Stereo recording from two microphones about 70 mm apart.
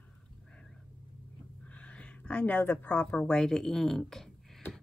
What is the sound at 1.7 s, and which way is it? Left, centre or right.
A woman's voice, centre.